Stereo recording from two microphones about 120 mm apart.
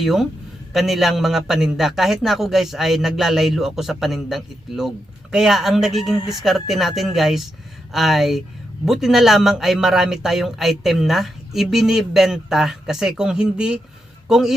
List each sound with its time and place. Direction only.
0.0 s a man's voice: centre (ahead or behind)